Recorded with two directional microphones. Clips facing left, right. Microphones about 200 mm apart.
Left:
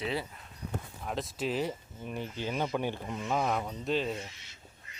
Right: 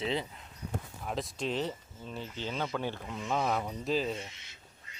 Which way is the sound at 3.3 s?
Centre (ahead or behind).